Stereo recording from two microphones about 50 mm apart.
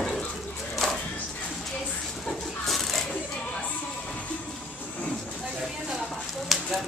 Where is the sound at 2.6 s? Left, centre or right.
Centre.